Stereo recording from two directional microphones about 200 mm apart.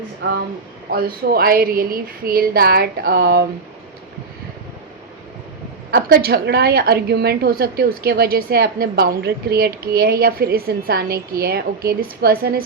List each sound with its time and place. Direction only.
0.9 s a woman's voice: 50° right (ahead or behind)
5.9 s a woman's voice: 50° right (ahead or behind)